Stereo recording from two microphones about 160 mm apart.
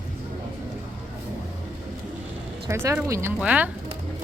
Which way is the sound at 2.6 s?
15° right (ahead or behind).